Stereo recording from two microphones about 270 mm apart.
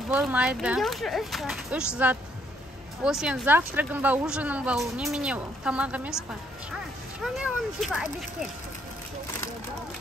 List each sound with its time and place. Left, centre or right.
0.1 s speech: centre
3.0 s speech: centre
7.2 s speech: centre